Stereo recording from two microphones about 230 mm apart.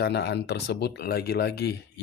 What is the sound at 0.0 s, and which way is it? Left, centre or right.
Speech, left.